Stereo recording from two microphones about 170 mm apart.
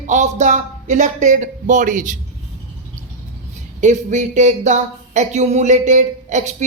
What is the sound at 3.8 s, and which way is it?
Speech, 45° right (ahead or behind).